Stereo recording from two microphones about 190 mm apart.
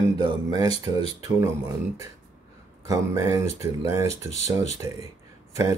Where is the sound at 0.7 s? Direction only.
30° left (ahead or behind).